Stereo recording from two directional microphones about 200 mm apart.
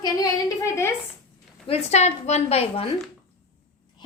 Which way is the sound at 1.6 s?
30° left (ahead or behind).